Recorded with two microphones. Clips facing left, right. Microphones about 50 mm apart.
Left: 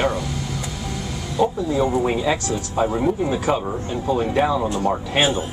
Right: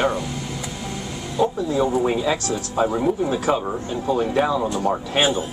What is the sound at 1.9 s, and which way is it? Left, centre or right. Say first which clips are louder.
Speech: even; centre.